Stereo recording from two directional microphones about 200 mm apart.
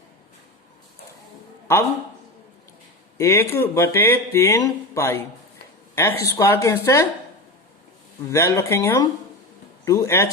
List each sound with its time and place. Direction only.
3.2 s speech: 15° left (ahead or behind)
8.3 s a man's voice: 15° left (ahead or behind)